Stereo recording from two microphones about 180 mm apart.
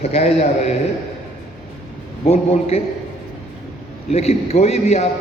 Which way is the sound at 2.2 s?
35° left (ahead or behind).